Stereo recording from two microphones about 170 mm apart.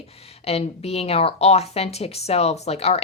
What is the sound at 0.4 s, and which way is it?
A woman's voice, 35° left (ahead or behind).